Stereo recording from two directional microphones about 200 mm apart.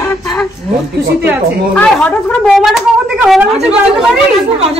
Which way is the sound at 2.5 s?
Centre (ahead or behind).